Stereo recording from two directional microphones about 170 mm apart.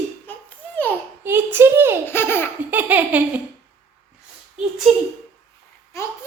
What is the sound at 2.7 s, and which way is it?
Speech, 10° right (ahead or behind).